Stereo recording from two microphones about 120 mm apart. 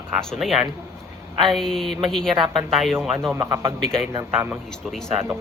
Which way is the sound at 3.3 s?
20° right (ahead or behind).